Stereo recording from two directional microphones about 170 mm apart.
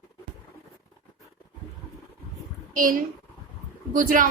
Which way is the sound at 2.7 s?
55° right (ahead or behind).